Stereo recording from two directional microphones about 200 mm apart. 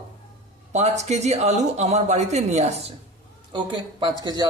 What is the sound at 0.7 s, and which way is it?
Speech, 35° right (ahead or behind).